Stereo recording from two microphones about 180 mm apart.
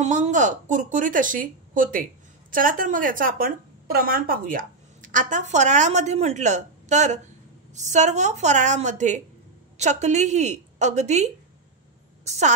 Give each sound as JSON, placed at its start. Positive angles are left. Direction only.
{"t": 0.0, "sound": "a woman's voice", "side_deg": -40}
{"t": 12.3, "sound": "a woman's voice", "side_deg": -40}